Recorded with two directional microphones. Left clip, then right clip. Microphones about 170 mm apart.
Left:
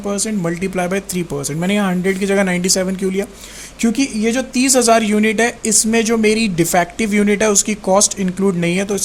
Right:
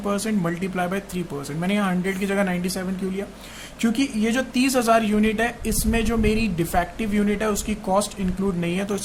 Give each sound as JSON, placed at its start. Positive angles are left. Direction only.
{"t": 0.0, "sound": "speech", "side_deg": 10}